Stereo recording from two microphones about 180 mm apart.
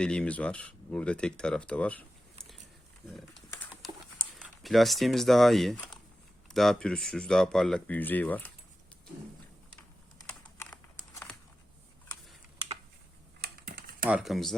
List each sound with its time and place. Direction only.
0.0 s speech: 5° left (ahead or behind)
4.4 s speech: centre (ahead or behind)
10.6 s crumpling: 15° left (ahead or behind)
13.4 s typing: 55° right (ahead or behind)
14.0 s speech: 5° right (ahead or behind)